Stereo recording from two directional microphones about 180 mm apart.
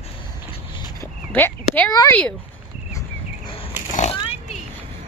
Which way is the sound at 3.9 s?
40° left (ahead or behind).